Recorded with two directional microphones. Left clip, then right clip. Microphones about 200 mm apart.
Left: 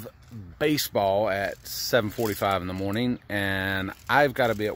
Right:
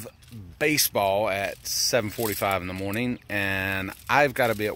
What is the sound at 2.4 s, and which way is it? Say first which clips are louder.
Speech: even; 20° left (ahead or behind).